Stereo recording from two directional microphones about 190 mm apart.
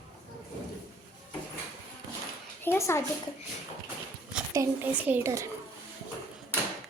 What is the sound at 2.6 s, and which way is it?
Speech, 15° left (ahead or behind).